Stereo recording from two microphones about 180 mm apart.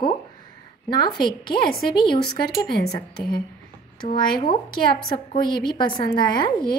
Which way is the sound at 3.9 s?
25° left (ahead or behind).